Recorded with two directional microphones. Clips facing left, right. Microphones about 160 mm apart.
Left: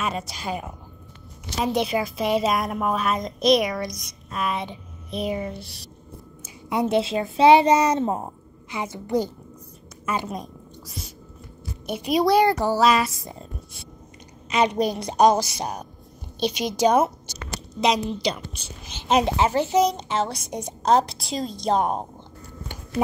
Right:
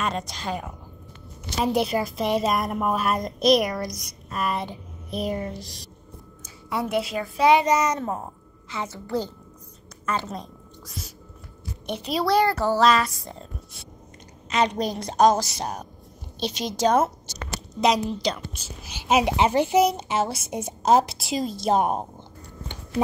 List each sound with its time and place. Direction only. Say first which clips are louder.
0.0 s speech: even; 5° left (ahead or behind)
1.7 s a child's voice: even; centre (ahead or behind)
6.4 s a child's voice: left 4 dB; 20° left (ahead or behind)
11.8 s a child's voice: left 4 dB; 10° left (ahead or behind); by 22.0 s 5° right (ahead or behind)